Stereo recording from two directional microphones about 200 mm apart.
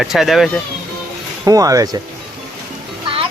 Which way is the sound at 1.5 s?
15° right (ahead or behind).